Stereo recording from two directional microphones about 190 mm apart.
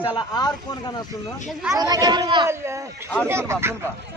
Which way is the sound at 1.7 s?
20° right (ahead or behind).